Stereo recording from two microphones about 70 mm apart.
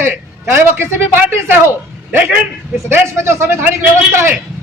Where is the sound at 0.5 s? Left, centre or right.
Right.